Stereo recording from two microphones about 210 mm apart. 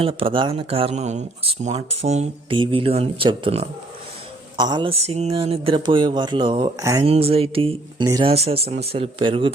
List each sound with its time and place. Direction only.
0.0 s speech: 25° right (ahead or behind)
7.0 s speech: 30° right (ahead or behind)